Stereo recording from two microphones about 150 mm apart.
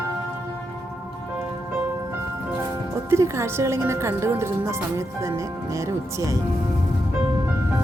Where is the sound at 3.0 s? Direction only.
20° right (ahead or behind).